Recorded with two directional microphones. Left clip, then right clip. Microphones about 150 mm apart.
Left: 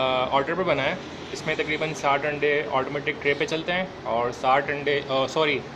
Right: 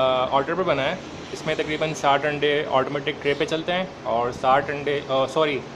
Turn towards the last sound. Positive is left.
turn(degrees=-10)  # may be behind; listen again after turning